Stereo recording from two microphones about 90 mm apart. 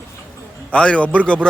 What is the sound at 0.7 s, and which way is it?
Speech, 10° left (ahead or behind).